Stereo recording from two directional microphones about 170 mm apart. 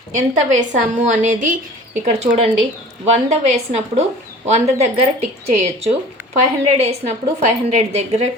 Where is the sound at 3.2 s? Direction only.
40° right (ahead or behind).